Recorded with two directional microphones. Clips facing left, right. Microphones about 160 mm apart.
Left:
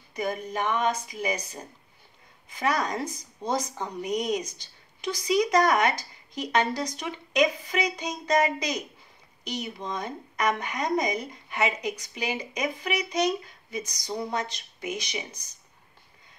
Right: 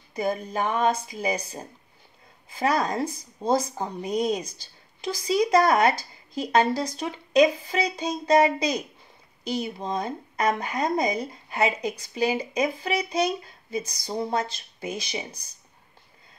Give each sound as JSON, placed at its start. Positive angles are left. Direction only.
{"t": 0.1, "sound": "speech", "side_deg": -30}